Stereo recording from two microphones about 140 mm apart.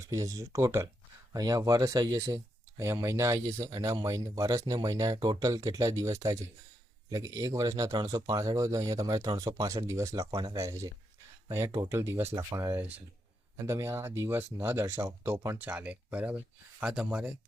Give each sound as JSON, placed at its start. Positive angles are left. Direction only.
{"t": 0.0, "sound": "speech", "side_deg": -25}